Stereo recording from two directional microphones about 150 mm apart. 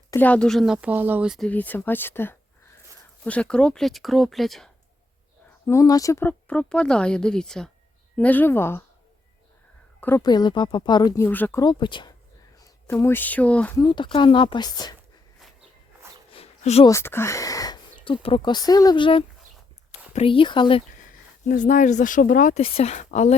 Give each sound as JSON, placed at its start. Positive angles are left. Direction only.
{"t": 0.1, "sound": "speech", "side_deg": 10}
{"t": 1.5, "sound": "speech", "side_deg": 10}
{"t": 5.6, "sound": "speech", "side_deg": 20}
{"t": 10.0, "sound": "a woman's voice", "side_deg": 15}
{"t": 10.2, "sound": "speech", "side_deg": 30}
{"t": 11.2, "sound": "speech", "side_deg": 10}
{"t": 11.6, "sound": "speech", "side_deg": 30}
{"t": 12.9, "sound": "speech", "side_deg": 15}
{"t": 13.7, "sound": "speech", "side_deg": 30}
{"t": 16.3, "sound": "a sound", "side_deg": 40}
{"t": 16.8, "sound": "speech", "side_deg": 15}
{"t": 18.0, "sound": "speech", "side_deg": 35}
{"t": 21.4, "sound": "speech", "side_deg": 60}
{"t": 22.6, "sound": "speech", "side_deg": 45}